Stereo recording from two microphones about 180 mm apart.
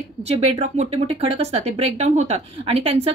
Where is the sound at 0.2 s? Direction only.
35° right (ahead or behind).